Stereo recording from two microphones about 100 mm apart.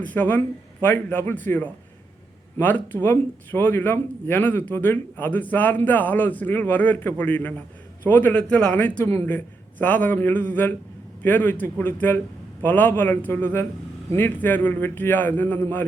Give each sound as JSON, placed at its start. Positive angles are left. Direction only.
{"t": 0.0, "sound": "a man's voice", "side_deg": 15}